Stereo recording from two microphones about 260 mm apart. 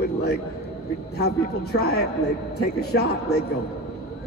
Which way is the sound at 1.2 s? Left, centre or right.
Left.